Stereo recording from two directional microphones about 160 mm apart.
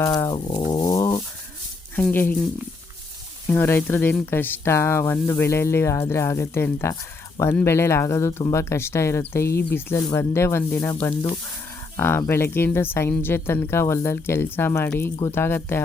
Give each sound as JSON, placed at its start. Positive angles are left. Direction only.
{"t": 0.0, "sound": "dog", "side_deg": 20}
{"t": 2.0, "sound": "a woman's voice", "side_deg": 10}
{"t": 3.4, "sound": "a woman's voice", "side_deg": 15}